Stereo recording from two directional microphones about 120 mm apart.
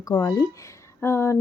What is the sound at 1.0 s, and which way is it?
Speech, 20° left (ahead or behind).